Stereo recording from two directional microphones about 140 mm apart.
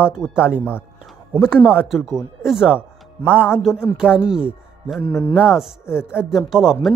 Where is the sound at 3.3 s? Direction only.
15° left (ahead or behind).